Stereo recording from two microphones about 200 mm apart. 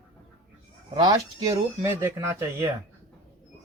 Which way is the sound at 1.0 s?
15° right (ahead or behind).